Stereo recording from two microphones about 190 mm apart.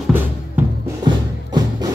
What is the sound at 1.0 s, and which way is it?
Music, 20° right (ahead or behind).